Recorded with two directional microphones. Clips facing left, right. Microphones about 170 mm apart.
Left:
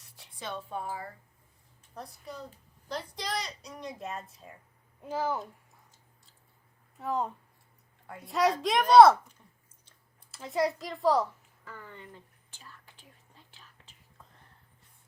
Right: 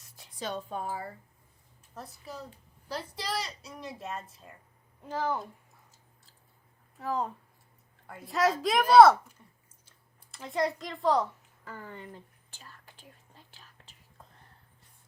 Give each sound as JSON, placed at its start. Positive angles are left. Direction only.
{"t": 0.3, "sound": "speech", "side_deg": -40}
{"t": 2.0, "sound": "a woman's voice", "side_deg": -5}
{"t": 7.0, "sound": "a woman's voice", "side_deg": 0}
{"t": 11.6, "sound": "whispering", "side_deg": -40}